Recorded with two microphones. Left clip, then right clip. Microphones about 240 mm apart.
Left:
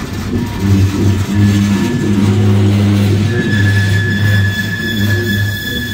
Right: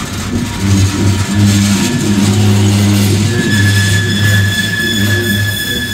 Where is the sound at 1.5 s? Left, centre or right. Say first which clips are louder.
Right 3 dB; right.